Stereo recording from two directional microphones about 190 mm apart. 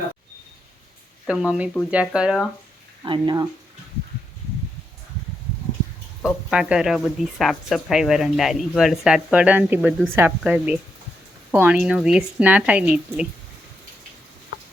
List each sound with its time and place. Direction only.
1.3 s speech: 5° right (ahead or behind)
3.0 s speech: 25° right (ahead or behind)
6.2 s a woman's voice: 5° right (ahead or behind)